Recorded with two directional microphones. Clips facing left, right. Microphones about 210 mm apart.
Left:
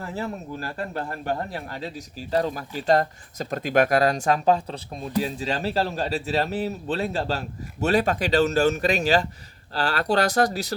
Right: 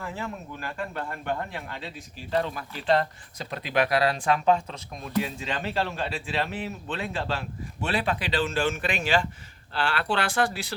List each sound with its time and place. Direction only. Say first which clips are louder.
0.0 s speech: left 4 dB; 40° left (ahead or behind)